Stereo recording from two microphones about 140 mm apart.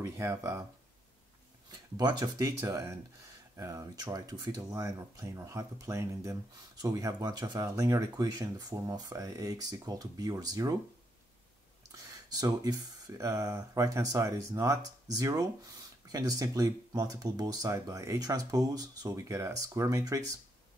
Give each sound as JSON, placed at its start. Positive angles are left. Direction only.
{"t": 0.0, "sound": "speech", "side_deg": -20}
{"t": 2.0, "sound": "speech", "side_deg": -30}
{"t": 11.9, "sound": "speech", "side_deg": -25}